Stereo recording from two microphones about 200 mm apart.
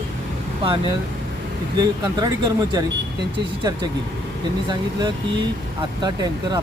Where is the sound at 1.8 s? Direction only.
20° right (ahead or behind).